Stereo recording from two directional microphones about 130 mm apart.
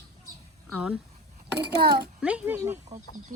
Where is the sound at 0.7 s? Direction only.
10° right (ahead or behind).